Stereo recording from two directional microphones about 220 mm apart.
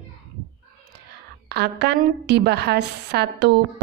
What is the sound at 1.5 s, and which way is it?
A woman's voice, 50° right (ahead or behind).